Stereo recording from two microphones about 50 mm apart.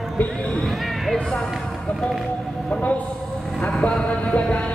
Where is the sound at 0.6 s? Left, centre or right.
Centre.